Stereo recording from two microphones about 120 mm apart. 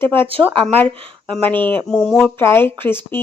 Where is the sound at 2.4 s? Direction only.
20° left (ahead or behind).